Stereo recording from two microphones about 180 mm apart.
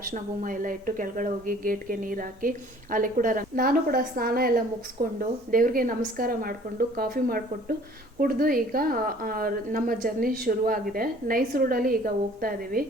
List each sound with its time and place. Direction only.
0.1 s a woman's voice: 50° right (ahead or behind)